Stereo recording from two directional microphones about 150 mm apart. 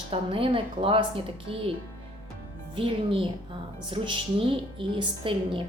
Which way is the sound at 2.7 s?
35° right (ahead or behind).